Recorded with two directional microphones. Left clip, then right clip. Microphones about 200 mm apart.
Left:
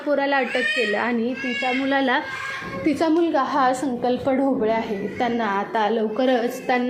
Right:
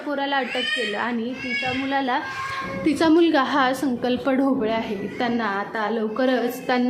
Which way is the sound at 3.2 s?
25° right (ahead or behind).